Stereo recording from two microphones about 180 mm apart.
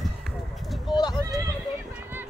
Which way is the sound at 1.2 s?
20° right (ahead or behind).